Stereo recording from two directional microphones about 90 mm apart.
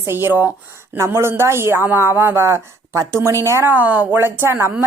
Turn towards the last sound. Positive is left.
turn(degrees=-30)  # may be behind; listen again after turning